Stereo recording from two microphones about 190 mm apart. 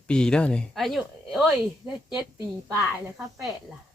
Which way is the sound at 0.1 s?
5° left (ahead or behind).